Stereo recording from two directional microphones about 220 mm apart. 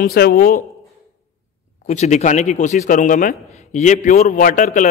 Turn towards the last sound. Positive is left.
turn(degrees=35)  # may be behind; listen again after turning